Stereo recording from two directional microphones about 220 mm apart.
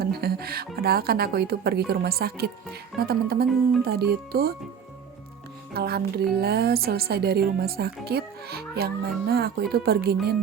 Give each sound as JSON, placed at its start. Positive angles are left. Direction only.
{"t": 0.0, "sound": "music", "side_deg": -45}
{"t": 0.8, "sound": "a woman's voice", "side_deg": -45}
{"t": 5.7, "sound": "a woman's voice", "side_deg": -45}